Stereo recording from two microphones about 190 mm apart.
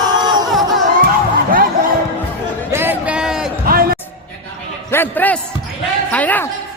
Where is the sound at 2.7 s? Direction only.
10° right (ahead or behind).